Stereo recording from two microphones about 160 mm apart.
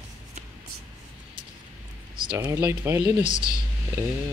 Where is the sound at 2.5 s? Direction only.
20° right (ahead or behind).